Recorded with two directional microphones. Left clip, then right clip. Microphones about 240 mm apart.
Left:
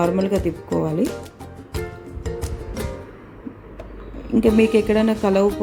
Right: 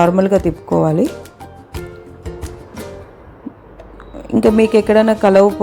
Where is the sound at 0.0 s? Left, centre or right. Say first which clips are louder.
Right 8 dB; right.